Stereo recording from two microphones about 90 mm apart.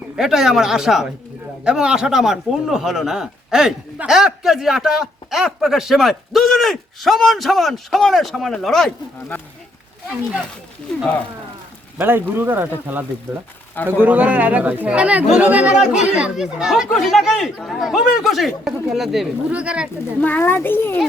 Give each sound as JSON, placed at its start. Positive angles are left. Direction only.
{"t": 0.2, "sound": "speech", "side_deg": -5}
{"t": 11.9, "sound": "a man's voice", "side_deg": -25}
{"t": 19.5, "sound": "speech", "side_deg": -15}
{"t": 20.1, "sound": "a child's voice", "side_deg": 20}